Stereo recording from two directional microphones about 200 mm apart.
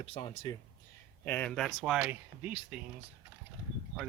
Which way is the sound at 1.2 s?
10° left (ahead or behind).